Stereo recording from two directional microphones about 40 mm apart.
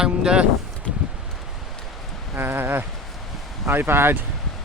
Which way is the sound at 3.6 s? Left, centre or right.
Right.